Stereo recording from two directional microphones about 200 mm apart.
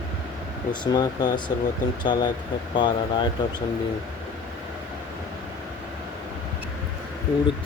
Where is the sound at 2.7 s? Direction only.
20° left (ahead or behind).